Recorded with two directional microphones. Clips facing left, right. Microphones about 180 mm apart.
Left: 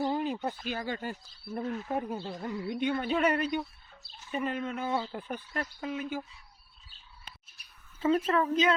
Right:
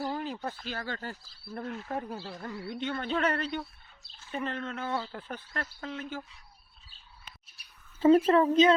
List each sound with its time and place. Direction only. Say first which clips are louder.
0.1 s speech: left 4 dB; 20° left (ahead or behind)
8.0 s speech: right 6 dB; 35° right (ahead or behind)